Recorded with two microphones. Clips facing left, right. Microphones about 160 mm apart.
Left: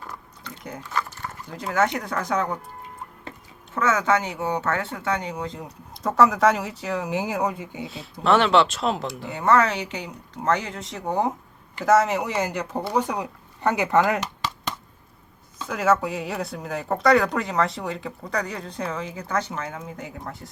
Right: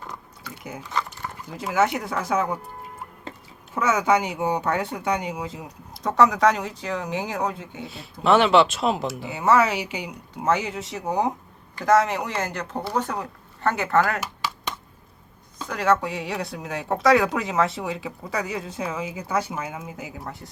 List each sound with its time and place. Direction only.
0.1 s chewing: 10° right (ahead or behind)
0.9 s a sound: 20° right (ahead or behind)
1.5 s speech: 5° right (ahead or behind)
3.8 s speech: 10° right (ahead or behind); by 7.9 s 10° left (ahead or behind)
7.9 s speech: 5° right (ahead or behind); by 14.2 s 15° left (ahead or behind)
15.6 s speech: 5° left (ahead or behind)